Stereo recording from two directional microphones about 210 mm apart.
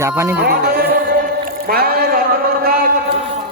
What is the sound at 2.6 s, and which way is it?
Mantra, 45° right (ahead or behind).